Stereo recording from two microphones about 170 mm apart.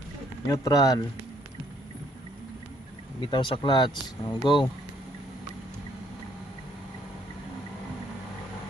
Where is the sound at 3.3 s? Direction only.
30° left (ahead or behind).